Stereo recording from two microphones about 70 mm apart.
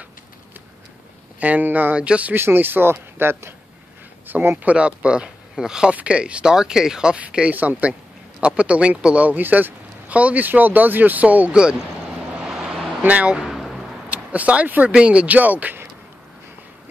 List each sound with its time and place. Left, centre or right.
1.4 s a man's voice: right
2.3 s a man's voice: right
12.4 s vehicle: centre
13.0 s a man's voice: centre
13.4 s a sound: centre
14.0 s speech: right